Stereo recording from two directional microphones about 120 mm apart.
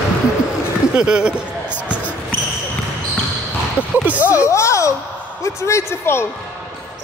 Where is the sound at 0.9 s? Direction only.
10° right (ahead or behind).